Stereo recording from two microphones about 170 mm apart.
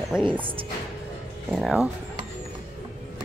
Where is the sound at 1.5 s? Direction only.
5° right (ahead or behind).